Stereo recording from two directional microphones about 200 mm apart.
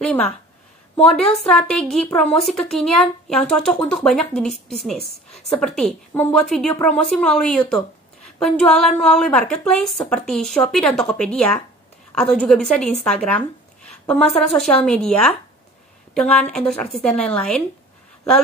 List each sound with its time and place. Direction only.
1.0 s a woman's voice: 5° left (ahead or behind)